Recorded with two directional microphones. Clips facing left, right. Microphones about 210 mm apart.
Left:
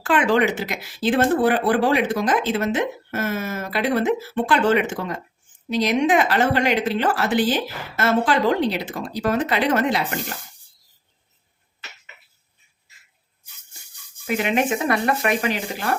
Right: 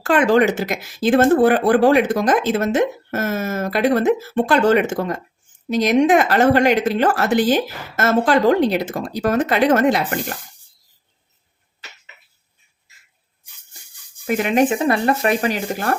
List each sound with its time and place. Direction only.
0.0 s speech: 40° right (ahead or behind)
14.3 s speech: 45° right (ahead or behind)